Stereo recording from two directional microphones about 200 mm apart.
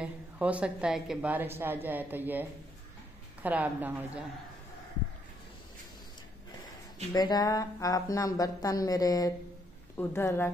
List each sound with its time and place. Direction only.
0.0 s a woman's voice: 5° right (ahead or behind)
3.4 s a woman's voice: 10° right (ahead or behind)
7.2 s speech: 20° left (ahead or behind)